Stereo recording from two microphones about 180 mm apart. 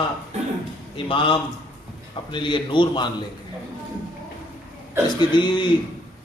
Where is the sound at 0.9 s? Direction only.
30° left (ahead or behind).